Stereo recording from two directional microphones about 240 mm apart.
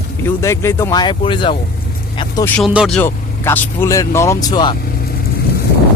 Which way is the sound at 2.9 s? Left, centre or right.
Centre.